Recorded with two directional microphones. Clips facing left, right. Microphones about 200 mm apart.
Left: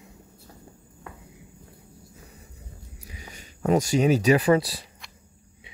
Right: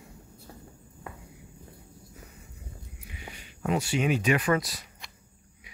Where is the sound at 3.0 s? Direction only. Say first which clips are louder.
Even; 40° left (ahead or behind).